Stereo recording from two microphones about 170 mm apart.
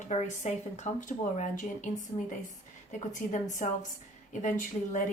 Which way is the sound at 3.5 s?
50° left (ahead or behind).